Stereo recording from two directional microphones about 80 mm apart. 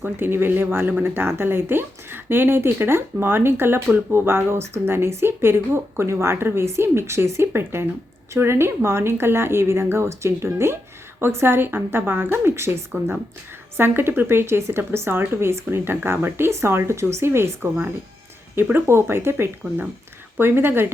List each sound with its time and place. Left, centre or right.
0.0 s a woman's voice: right